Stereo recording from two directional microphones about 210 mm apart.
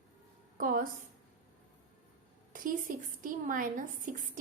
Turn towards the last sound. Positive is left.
turn(degrees=-40)  # may be behind; listen again after turning